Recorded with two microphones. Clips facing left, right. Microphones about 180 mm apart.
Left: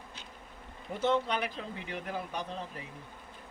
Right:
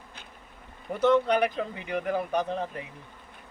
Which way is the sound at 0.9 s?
65° right (ahead or behind).